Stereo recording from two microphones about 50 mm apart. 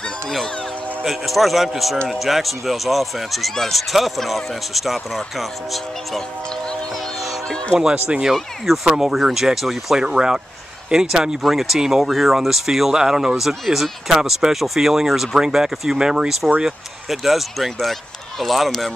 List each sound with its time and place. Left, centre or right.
1.0 s speech: centre
7.8 s speech: centre